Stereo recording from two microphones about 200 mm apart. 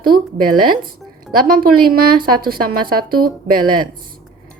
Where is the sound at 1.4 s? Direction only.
45° right (ahead or behind).